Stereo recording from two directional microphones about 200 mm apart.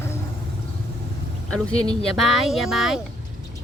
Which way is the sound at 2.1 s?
Centre (ahead or behind).